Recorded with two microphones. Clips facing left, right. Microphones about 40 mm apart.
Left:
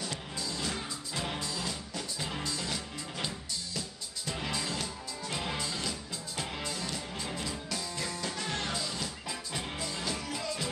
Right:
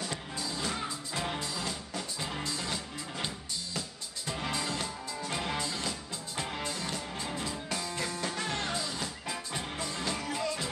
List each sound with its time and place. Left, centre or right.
0.0 s music: centre
4.5 s music: centre
7.9 s music: right
8.5 s music: centre
9.0 s music: centre